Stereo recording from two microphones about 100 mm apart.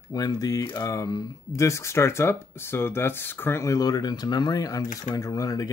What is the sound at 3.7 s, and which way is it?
Speech, 40° left (ahead or behind).